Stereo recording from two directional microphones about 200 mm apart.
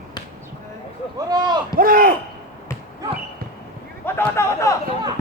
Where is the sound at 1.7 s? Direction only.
45° right (ahead or behind).